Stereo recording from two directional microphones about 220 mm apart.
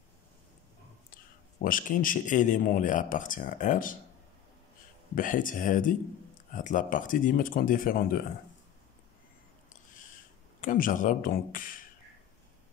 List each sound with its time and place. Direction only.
1.1 s speech: 40° left (ahead or behind)
5.1 s speech: 35° left (ahead or behind)
10.6 s speech: 35° left (ahead or behind)